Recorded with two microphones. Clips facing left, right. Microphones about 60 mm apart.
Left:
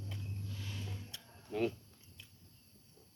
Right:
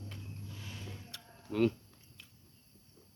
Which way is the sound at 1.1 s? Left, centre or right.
Right.